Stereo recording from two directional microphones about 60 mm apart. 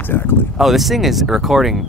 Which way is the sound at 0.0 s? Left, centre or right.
Left.